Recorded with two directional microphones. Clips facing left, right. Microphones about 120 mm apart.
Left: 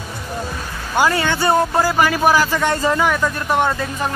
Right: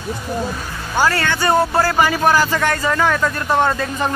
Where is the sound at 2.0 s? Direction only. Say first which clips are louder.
Even; centre (ahead or behind).